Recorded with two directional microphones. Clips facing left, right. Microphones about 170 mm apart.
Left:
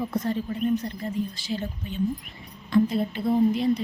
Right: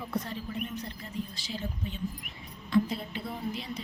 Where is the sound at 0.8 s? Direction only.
50° left (ahead or behind).